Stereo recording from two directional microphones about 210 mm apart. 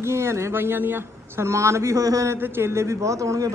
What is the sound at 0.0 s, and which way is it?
Speech, 10° right (ahead or behind).